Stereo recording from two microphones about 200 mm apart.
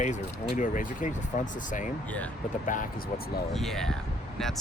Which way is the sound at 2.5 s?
40° left (ahead or behind).